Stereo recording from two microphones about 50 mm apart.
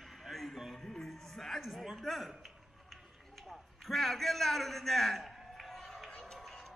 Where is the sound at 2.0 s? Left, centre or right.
Centre.